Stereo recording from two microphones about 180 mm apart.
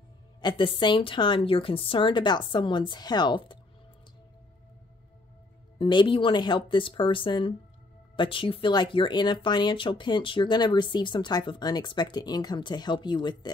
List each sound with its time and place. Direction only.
0.4 s speech: 25° left (ahead or behind)
5.8 s speech: 25° left (ahead or behind)